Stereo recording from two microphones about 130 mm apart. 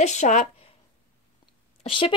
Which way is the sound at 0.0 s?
65° left (ahead or behind).